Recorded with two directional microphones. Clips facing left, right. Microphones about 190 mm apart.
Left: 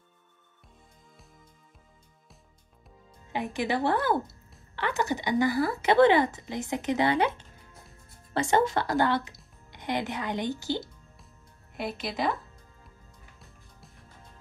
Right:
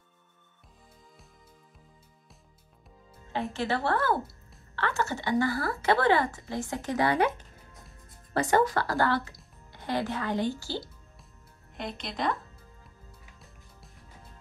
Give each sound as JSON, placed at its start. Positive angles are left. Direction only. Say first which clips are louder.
{"t": 3.3, "sound": "a woman's voice", "louder": "left 1 dB", "side_deg": 15}
{"t": 11.7, "sound": "speech", "louder": "left 4 dB", "side_deg": 5}
{"t": 13.4, "sound": "music", "louder": "even", "side_deg": 0}